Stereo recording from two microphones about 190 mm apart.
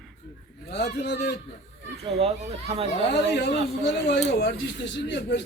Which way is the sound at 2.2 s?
30° right (ahead or behind).